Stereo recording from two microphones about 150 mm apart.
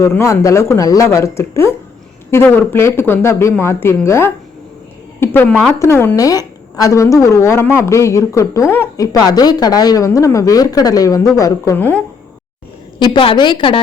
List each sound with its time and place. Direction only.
0.0 s a woman's voice: 20° left (ahead or behind)
13.0 s a woman's voice: 35° left (ahead or behind)